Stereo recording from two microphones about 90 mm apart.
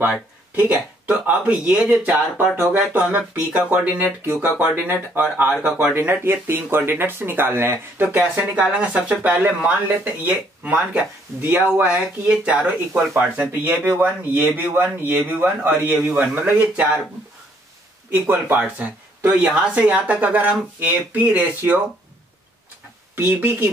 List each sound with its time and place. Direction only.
0.6 s speech: 15° right (ahead or behind)
5.6 s speech: 15° right (ahead or behind)
5.9 s speech: 25° right (ahead or behind)
8.2 s speech: 15° right (ahead or behind)
13.5 s speech: 25° right (ahead or behind)
18.1 s speech: 25° right (ahead or behind)
23.1 s speech: 25° right (ahead or behind)